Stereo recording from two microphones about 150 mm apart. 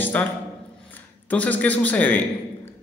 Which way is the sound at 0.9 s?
10° left (ahead or behind).